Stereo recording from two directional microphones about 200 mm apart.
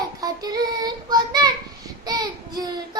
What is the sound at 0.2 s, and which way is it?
Child singing, 20° right (ahead or behind).